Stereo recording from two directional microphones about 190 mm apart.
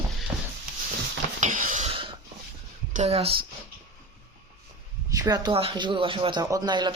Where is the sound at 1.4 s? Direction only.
45° right (ahead or behind); by 2.1 s 30° right (ahead or behind).